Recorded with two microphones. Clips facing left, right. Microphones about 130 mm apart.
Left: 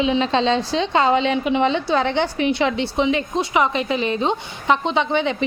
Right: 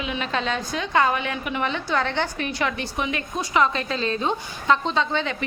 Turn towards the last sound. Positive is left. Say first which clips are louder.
# left 5 dB
turn(degrees=20)  # may be behind; listen again after turning